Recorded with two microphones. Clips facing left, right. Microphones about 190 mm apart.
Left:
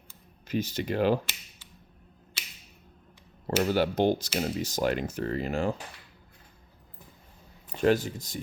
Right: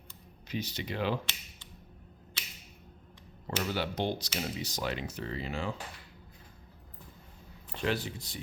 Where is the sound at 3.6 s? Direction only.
45° left (ahead or behind).